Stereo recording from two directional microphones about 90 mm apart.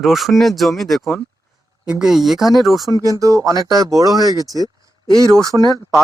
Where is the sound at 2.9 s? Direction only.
40° right (ahead or behind).